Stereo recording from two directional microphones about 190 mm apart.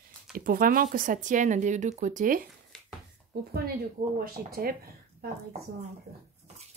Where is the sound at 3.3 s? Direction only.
55° right (ahead or behind).